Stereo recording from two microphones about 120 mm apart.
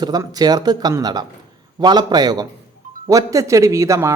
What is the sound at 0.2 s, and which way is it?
A man's voice, 30° right (ahead or behind).